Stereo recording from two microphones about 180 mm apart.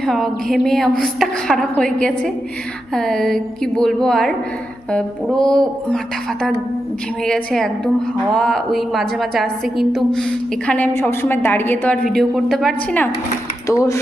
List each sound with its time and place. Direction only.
0.0 s a woman's voice: centre (ahead or behind)
7.3 s a woman's voice: 5° left (ahead or behind)
13.7 s speech: 15° left (ahead or behind)